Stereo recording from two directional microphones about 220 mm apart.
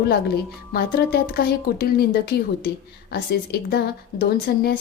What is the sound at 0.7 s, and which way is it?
A woman's voice, 45° left (ahead or behind).